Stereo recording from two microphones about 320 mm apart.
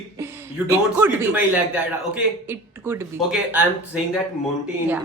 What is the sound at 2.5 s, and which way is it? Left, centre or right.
Speech, centre.